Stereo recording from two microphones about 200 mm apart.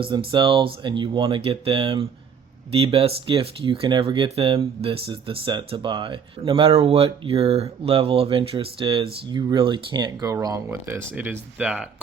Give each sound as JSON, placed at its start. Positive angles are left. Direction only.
{"t": 0.0, "sound": "speech", "side_deg": -25}